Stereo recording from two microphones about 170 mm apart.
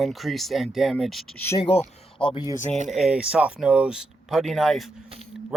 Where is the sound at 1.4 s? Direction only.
15° left (ahead or behind).